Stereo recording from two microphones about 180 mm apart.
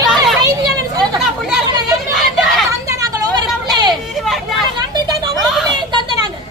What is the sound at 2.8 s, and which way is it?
Vehicle, 20° right (ahead or behind).